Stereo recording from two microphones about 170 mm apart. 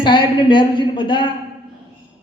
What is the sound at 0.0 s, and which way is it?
A man's voice, 30° left (ahead or behind).